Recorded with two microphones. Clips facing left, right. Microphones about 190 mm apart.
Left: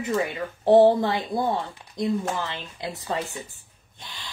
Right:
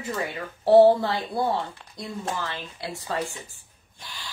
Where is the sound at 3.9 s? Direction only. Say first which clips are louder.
Even; 20° left (ahead or behind).